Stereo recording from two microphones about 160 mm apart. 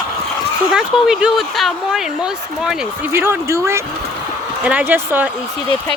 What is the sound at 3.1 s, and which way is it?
Speech, 15° right (ahead or behind).